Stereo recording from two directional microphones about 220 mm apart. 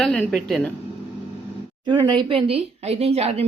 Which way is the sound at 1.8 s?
20° right (ahead or behind).